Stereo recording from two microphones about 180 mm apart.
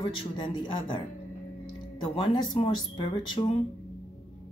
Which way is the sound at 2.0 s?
25° left (ahead or behind).